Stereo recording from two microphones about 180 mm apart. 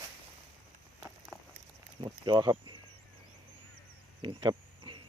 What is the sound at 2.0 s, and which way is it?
Speech, 30° right (ahead or behind).